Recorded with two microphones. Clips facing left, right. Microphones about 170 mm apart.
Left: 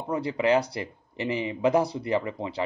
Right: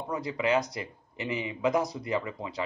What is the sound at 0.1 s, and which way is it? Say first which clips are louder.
Speech: left 4 dB; 30° left (ahead or behind).